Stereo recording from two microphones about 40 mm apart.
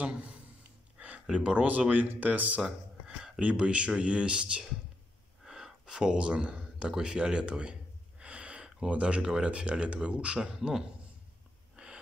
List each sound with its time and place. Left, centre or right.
0.0 s a sound: right
1.2 s speech: right
3.5 s speech: right
5.4 s speech: centre
8.2 s a sound: right
8.8 s speech: right
9.2 s a man's voice: centre
10.4 s a man's voice: centre
11.7 s snort: right